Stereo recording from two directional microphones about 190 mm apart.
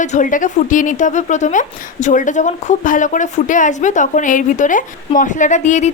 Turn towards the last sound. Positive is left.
turn(degrees=40)  # may be behind; listen again after turning